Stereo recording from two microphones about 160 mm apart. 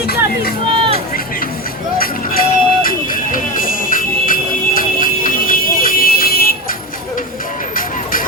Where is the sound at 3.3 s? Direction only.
60° left (ahead or behind).